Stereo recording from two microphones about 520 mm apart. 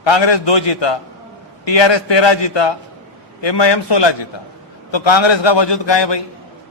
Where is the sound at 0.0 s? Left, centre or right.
Left.